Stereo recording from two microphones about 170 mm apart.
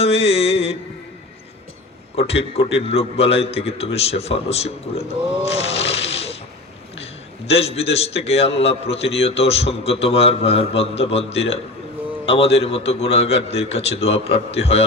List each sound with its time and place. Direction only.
0.0 s music: 35° left (ahead or behind)
2.1 s a man's voice: 35° left (ahead or behind)